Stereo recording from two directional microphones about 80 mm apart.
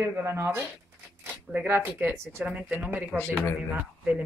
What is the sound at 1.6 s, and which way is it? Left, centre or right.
Speech, right.